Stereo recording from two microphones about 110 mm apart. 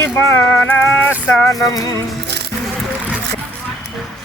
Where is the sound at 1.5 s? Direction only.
30° left (ahead or behind).